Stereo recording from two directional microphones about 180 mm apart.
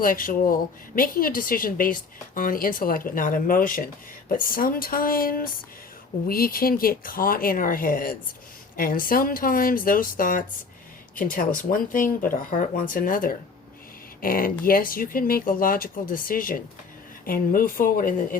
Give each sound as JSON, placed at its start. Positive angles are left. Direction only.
{"t": 0.0, "sound": "a woman's voice", "side_deg": 50}